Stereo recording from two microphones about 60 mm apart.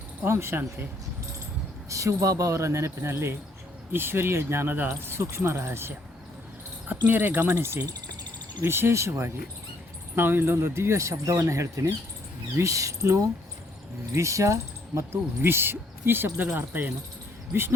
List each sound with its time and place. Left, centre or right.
0.3 s speech: right
1.9 s speech: right
6.8 s speech: right
7.5 s speech: right